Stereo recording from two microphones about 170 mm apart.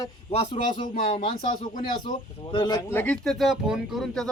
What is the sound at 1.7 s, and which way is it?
Speech, 50° left (ahead or behind).